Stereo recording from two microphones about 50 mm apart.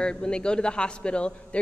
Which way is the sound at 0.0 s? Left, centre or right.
Centre.